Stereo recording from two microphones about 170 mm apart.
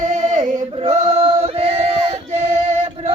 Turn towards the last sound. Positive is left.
turn(degrees=-35)  # may be behind; listen again after turning